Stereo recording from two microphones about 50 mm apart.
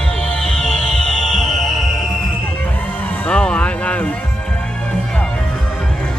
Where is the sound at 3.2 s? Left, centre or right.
Centre.